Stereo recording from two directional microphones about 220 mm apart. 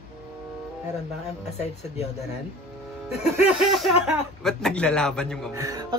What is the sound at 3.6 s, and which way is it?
A man's voice, centre (ahead or behind).